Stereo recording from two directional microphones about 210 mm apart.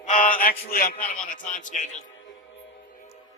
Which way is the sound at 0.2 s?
40° left (ahead or behind).